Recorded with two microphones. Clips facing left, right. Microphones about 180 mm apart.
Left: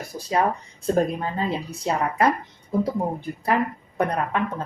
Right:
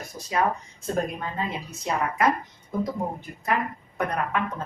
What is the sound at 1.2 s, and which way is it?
Speech, 30° left (ahead or behind).